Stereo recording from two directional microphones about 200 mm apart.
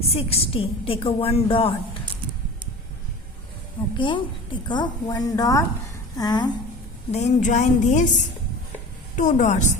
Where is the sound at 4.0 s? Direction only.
25° left (ahead or behind).